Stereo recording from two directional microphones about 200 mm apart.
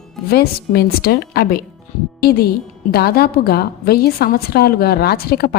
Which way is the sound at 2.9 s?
50° left (ahead or behind).